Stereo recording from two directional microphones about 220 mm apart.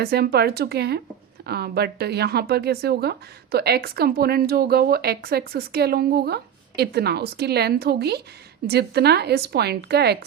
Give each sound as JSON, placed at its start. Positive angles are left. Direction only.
{"t": 0.0, "sound": "speech", "side_deg": -45}